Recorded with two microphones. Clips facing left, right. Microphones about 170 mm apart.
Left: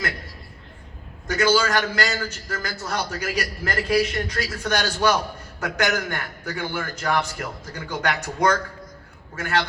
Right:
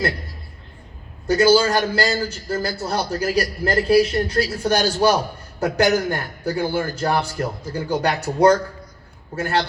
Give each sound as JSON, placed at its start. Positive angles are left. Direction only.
{"t": 1.3, "sound": "a man's voice", "side_deg": -35}